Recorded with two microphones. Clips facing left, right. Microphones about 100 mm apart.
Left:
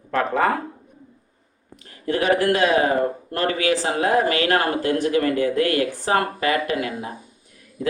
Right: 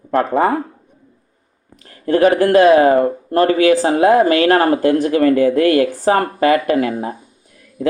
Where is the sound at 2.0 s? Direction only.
40° right (ahead or behind).